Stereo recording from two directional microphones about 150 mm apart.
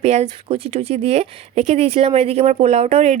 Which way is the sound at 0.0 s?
45° right (ahead or behind).